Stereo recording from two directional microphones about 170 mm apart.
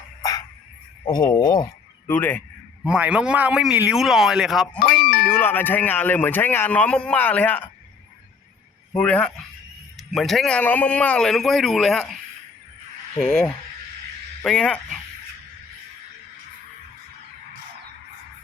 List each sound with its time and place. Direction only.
0.2 s a sound: 20° left (ahead or behind)
1.0 s speech: 25° left (ahead or behind)
2.0 s speech: 10° left (ahead or behind)
2.8 s speech: 5° right (ahead or behind)
5.3 s speech: 10° left (ahead or behind)
8.9 s speech: 5° left (ahead or behind)
13.1 s speech: 5° left (ahead or behind)